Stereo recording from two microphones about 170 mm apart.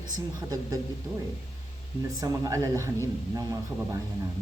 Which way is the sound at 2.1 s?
20° right (ahead or behind).